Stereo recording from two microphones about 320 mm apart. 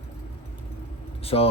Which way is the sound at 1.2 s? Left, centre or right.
Centre.